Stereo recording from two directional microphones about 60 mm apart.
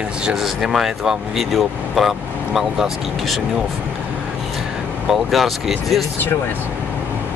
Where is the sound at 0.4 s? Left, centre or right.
Centre.